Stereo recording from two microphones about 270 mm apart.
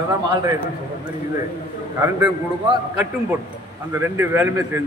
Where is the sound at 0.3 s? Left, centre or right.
Centre.